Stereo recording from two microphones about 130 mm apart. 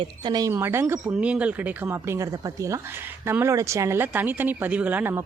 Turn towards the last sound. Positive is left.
turn(degrees=-15)  # may be behind; listen again after turning